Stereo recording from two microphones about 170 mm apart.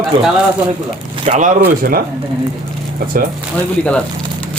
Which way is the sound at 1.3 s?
50° right (ahead or behind).